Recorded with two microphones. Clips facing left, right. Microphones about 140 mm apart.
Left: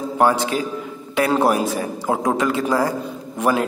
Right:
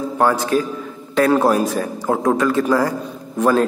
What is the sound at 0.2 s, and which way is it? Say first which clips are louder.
A man's voice: right 1 dB; 20° left (ahead or behind).